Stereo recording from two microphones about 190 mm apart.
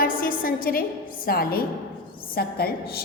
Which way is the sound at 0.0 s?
45° left (ahead or behind).